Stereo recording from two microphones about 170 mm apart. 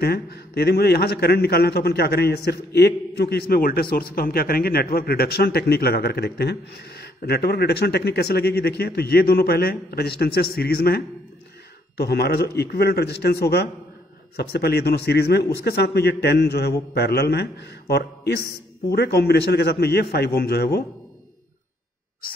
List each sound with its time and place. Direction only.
0.0 s a man's voice: 70° left (ahead or behind)